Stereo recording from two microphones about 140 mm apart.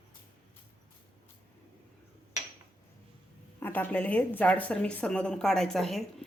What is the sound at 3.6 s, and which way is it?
A woman's voice, 15° left (ahead or behind).